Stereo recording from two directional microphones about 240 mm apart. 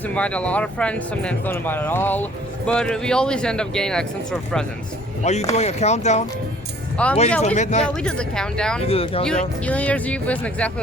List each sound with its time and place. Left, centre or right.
0.1 s speech: centre
5.2 s speech: left
6.9 s speech: centre
7.4 s speech: left
7.9 s speech: centre
8.9 s speech: left
9.6 s speech: centre